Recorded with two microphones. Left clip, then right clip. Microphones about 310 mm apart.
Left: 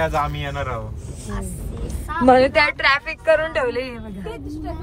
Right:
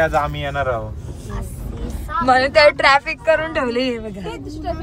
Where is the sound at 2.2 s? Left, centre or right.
Centre.